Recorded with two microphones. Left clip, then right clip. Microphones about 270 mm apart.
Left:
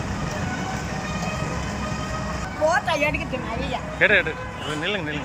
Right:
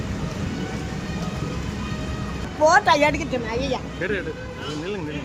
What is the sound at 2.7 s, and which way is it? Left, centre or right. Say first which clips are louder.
Speech: right 5 dB; centre.